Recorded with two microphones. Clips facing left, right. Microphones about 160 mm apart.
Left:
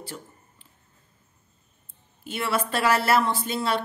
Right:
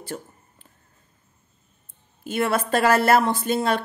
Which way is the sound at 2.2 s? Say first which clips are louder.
Right 4 dB; 45° right (ahead or behind).